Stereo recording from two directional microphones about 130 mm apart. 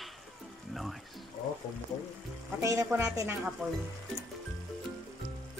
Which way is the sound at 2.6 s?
25° right (ahead or behind).